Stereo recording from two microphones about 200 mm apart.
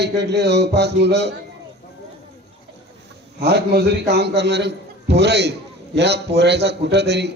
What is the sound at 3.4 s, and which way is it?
A man's voice, 55° right (ahead or behind).